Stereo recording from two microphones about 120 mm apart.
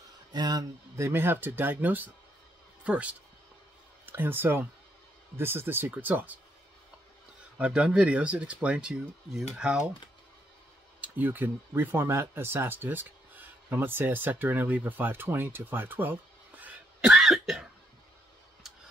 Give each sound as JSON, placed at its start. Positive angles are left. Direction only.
{"t": 0.3, "sound": "speech", "side_deg": -35}
{"t": 0.9, "sound": "speech", "side_deg": -20}
{"t": 7.5, "sound": "speech", "side_deg": -10}
{"t": 11.0, "sound": "speech", "side_deg": -15}
{"t": 17.1, "sound": "cough", "side_deg": -5}